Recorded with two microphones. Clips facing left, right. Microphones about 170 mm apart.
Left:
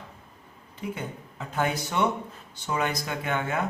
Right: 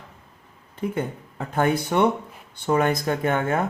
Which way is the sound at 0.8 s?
50° right (ahead or behind).